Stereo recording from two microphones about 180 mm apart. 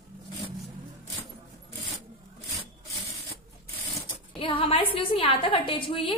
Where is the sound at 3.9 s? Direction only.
30° left (ahead or behind).